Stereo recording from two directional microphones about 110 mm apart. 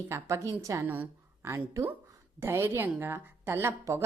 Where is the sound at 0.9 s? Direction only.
20° right (ahead or behind).